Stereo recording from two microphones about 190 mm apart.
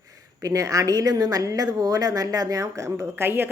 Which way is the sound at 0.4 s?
15° right (ahead or behind).